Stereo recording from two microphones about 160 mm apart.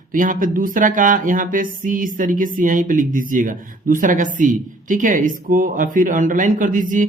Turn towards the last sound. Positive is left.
turn(degrees=-55)  # may be behind; listen again after turning